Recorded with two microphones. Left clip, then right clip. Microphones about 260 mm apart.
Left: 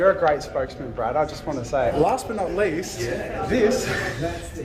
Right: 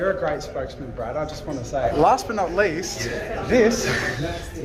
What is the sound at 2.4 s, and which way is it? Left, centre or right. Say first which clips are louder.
Speech: right 2 dB; centre.